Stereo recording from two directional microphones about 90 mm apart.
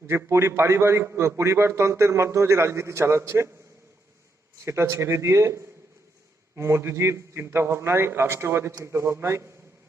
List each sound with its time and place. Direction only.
0.1 s a man's voice: 30° right (ahead or behind)
4.6 s a man's voice: 30° right (ahead or behind)